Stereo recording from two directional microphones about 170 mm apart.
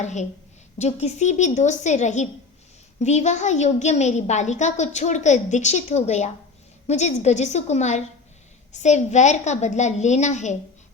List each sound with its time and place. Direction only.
0.0 s a woman's voice: 45° left (ahead or behind)